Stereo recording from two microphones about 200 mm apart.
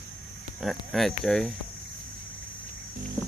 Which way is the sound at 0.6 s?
Centre (ahead or behind).